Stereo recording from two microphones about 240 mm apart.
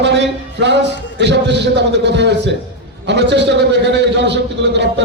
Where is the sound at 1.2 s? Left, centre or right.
Right.